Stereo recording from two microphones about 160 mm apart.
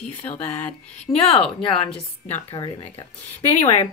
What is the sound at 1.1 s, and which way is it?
Speech, 35° left (ahead or behind).